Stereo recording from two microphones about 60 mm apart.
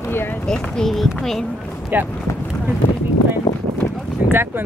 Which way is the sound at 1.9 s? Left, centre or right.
Right.